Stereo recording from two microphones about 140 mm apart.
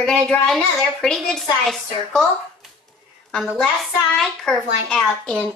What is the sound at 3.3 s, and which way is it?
A woman's voice, centre (ahead or behind).